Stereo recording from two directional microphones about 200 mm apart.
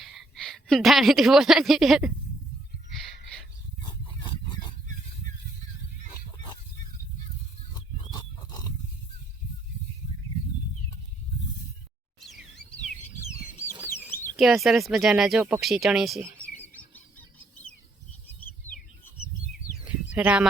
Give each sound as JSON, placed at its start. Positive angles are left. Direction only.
{"t": 0.0, "sound": "a woman's voice", "side_deg": 0}
{"t": 2.9, "sound": "a sound", "side_deg": 0}
{"t": 3.8, "sound": "a sound", "side_deg": 25}
{"t": 6.1, "sound": "goose", "side_deg": 20}
{"t": 7.9, "sound": "wild animals", "side_deg": 20}
{"t": 12.2, "sound": "chirp", "side_deg": 0}
{"t": 14.3, "sound": "speech", "side_deg": 0}
{"t": 16.9, "sound": "chicken", "side_deg": 5}
{"t": 19.5, "sound": "bird", "side_deg": -5}
{"t": 20.1, "sound": "speech", "side_deg": -5}